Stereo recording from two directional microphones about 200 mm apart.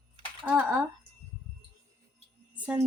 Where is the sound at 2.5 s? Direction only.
5° right (ahead or behind).